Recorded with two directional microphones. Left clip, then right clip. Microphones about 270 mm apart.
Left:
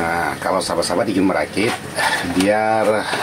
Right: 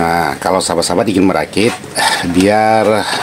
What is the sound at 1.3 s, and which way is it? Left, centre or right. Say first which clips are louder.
Speech: right 5 dB; right.